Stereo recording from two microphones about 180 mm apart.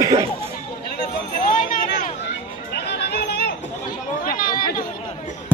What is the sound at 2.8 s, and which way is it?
Music, 65° left (ahead or behind).